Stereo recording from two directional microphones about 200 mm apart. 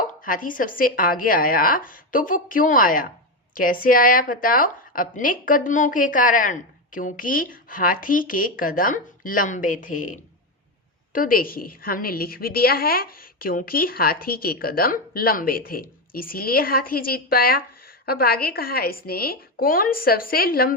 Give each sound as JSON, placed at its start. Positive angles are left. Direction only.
{"t": 0.2, "sound": "a woman's voice", "side_deg": 45}